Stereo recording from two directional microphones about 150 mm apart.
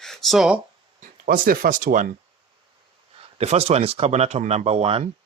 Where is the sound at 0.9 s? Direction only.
70° right (ahead or behind).